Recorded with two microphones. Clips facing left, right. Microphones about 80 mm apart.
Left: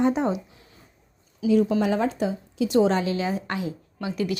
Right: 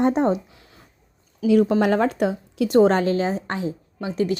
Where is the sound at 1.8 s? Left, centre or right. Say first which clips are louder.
Right 4 dB; right.